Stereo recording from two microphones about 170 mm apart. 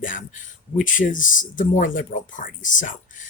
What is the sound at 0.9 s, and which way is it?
Speech, 50° left (ahead or behind).